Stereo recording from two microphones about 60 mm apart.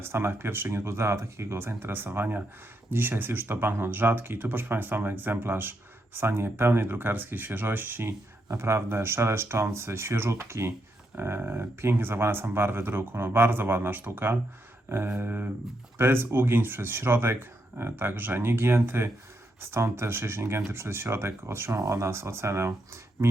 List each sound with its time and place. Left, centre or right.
0.0 s speech: right
8.4 s speech: right
11.1 s speech: right